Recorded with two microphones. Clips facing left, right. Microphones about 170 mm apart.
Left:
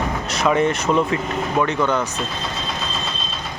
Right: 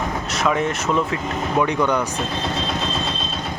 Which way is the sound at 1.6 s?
15° right (ahead or behind).